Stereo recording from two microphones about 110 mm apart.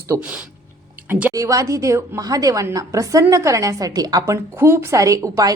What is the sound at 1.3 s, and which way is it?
A woman's voice, 30° right (ahead or behind).